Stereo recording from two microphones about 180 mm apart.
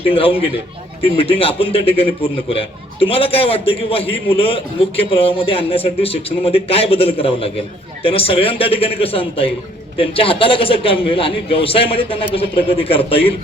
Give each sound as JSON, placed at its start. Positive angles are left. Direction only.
{"t": 0.0, "sound": "a man's voice", "side_deg": 30}